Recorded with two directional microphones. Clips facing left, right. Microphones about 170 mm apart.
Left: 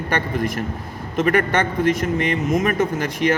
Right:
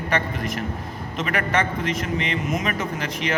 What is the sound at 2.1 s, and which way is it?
Speech, 50° left (ahead or behind).